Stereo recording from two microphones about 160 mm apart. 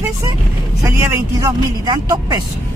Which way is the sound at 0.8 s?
15° right (ahead or behind).